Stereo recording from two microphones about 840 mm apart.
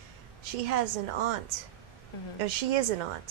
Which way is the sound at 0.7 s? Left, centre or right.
Right.